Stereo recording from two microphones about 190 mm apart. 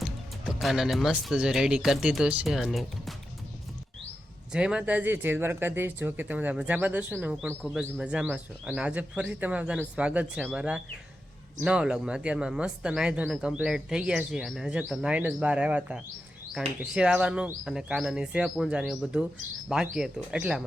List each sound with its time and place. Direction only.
0.0 s speech: centre (ahead or behind)
4.5 s speech: 5° right (ahead or behind)